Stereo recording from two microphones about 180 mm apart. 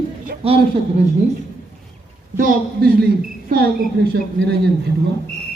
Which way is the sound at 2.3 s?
50° right (ahead or behind).